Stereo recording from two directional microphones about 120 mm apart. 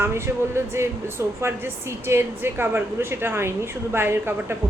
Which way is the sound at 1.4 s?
20° right (ahead or behind).